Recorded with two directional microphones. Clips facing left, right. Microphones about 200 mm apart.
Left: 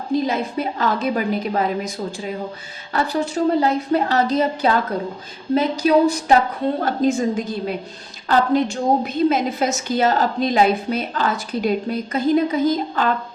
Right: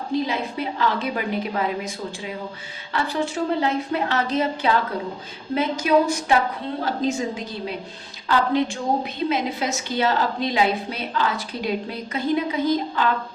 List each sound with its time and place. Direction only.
0.3 s a woman's voice: 45° left (ahead or behind)
6.8 s a woman's voice: 50° left (ahead or behind)